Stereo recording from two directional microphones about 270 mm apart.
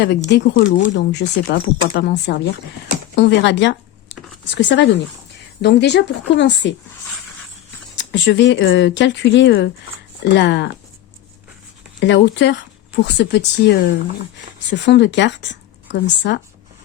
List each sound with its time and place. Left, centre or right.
0.3 s speech: left
7.9 s speech: left
11.9 s speech: left